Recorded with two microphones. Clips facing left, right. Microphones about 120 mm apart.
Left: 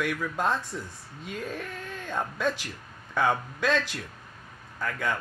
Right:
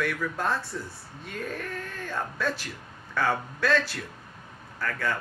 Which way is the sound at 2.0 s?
20° left (ahead or behind).